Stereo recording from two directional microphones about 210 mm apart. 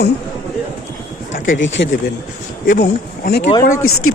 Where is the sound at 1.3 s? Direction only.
60° left (ahead or behind).